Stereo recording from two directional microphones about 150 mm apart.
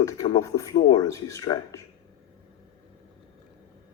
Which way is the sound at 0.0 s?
20° left (ahead or behind).